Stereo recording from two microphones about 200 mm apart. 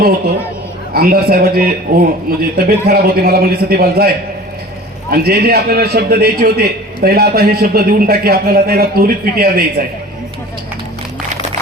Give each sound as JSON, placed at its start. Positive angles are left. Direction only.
{"t": 0.9, "sound": "a man's voice", "side_deg": -50}
{"t": 5.1, "sound": "a man's voice", "side_deg": -50}